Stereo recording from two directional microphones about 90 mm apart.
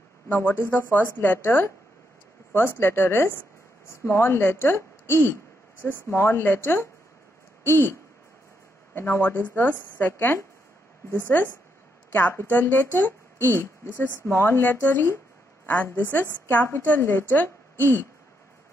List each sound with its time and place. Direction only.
0.3 s speech: 25° left (ahead or behind)
8.9 s speech: 20° left (ahead or behind)